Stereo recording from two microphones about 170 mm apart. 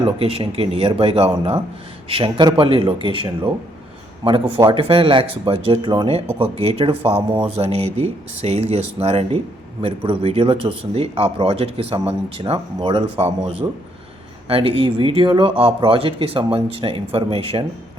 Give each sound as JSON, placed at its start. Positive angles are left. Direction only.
{"t": 0.0, "sound": "speech", "side_deg": -35}